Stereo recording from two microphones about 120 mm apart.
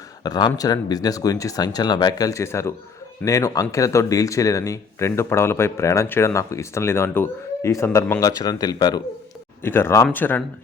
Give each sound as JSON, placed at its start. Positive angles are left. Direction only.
{"t": 0.2, "sound": "speech", "side_deg": 35}
{"t": 9.6, "sound": "speech", "side_deg": 20}